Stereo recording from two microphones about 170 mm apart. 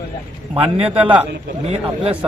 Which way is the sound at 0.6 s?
35° right (ahead or behind).